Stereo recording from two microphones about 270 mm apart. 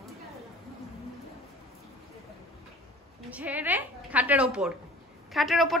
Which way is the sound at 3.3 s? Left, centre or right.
Centre.